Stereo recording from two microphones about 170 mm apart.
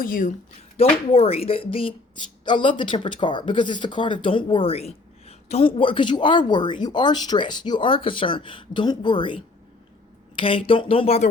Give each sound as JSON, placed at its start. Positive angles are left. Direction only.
{"t": 0.0, "sound": "speech", "side_deg": 55}
{"t": 0.8, "sound": "speech", "side_deg": 35}